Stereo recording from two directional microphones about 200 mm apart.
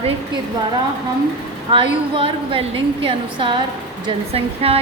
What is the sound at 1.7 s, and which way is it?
A woman's voice, 25° right (ahead or behind).